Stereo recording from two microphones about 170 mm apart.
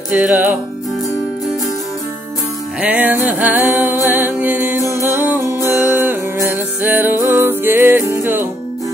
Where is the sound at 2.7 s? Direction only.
10° right (ahead or behind).